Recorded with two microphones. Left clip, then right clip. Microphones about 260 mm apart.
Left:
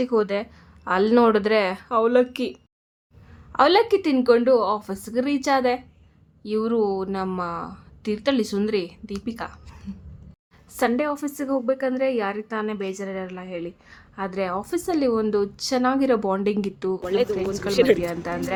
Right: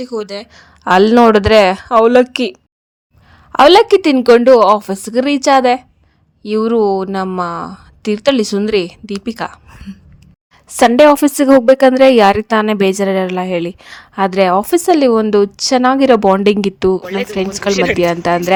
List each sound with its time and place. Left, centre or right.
0.1 s speech: centre
0.5 s a woman's voice: right
3.5 s a woman's voice: right
10.7 s a woman's voice: right
17.0 s speech: centre
17.2 s a woman's voice: right